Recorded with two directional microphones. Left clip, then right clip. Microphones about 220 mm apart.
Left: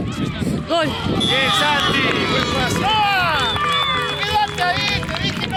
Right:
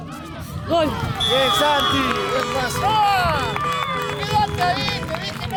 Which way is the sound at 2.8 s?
60° right (ahead or behind).